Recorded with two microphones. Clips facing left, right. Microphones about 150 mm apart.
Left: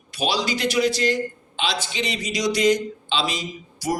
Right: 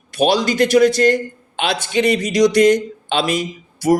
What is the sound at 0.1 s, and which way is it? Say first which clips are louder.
A man's voice: right 8 dB; 50° right (ahead or behind).